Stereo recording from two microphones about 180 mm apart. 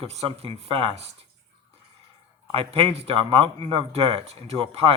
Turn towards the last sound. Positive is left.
turn(degrees=-35)  # may be behind; listen again after turning